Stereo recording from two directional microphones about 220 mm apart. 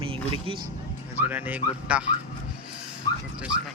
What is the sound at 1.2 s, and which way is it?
Speech, 10° right (ahead or behind).